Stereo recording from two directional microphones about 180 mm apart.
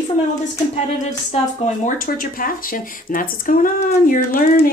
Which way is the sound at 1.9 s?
50° left (ahead or behind).